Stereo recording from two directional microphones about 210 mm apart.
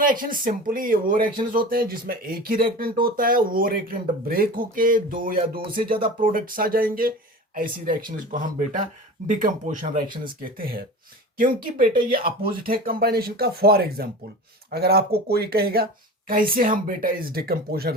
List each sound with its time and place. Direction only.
0.0 s speech: 40° right (ahead or behind)